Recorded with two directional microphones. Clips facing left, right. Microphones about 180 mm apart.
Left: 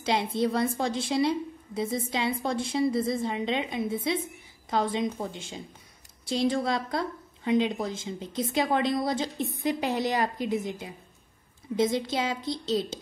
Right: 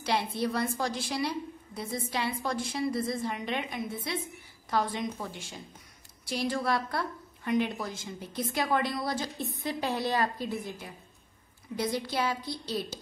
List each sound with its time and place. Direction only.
0.0 s a woman's voice: 20° left (ahead or behind)
6.5 s a woman's voice: 20° left (ahead or behind)